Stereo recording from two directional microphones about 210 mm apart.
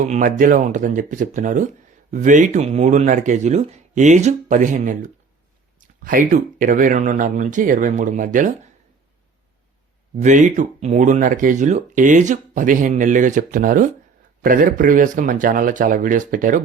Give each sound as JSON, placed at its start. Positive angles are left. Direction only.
{"t": 0.0, "sound": "speech", "side_deg": -40}
{"t": 10.2, "sound": "speech", "side_deg": -35}